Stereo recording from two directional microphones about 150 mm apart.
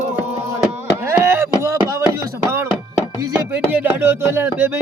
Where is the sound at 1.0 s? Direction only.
15° right (ahead or behind).